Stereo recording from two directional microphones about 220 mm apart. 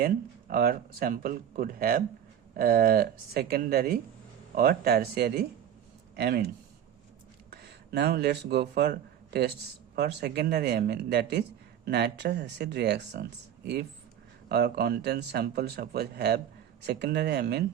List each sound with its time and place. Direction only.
0.0 s speech: 40° right (ahead or behind)
7.5 s speech: 45° right (ahead or behind)
14.5 s speech: 45° right (ahead or behind)